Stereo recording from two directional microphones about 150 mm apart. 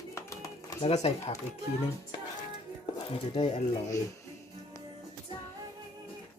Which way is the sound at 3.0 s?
35° left (ahead or behind).